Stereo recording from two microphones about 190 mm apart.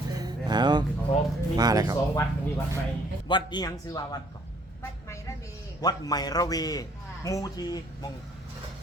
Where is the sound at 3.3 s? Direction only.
25° left (ahead or behind).